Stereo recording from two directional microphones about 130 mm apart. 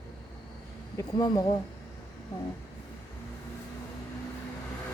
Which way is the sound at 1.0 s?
30° left (ahead or behind).